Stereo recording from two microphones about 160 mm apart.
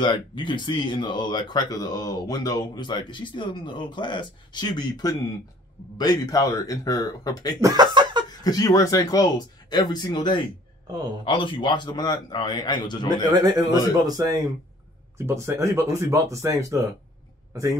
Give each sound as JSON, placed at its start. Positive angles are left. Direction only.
{"t": 0.0, "sound": "speech", "side_deg": 30}
{"t": 7.6, "sound": "chuckle", "side_deg": -25}
{"t": 8.3, "sound": "speech", "side_deg": 25}
{"t": 10.9, "sound": "speech", "side_deg": -25}
{"t": 11.2, "sound": "speech", "side_deg": 30}
{"t": 13.1, "sound": "speech", "side_deg": -25}